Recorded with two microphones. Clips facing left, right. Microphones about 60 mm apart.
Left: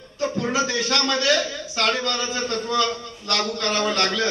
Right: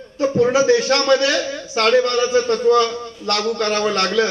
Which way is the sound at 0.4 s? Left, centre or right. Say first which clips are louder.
Right 11 dB; right.